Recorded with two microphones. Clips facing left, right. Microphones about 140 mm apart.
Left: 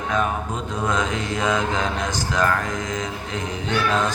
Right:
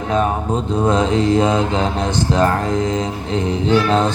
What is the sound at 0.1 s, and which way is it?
Mantra, 30° right (ahead or behind).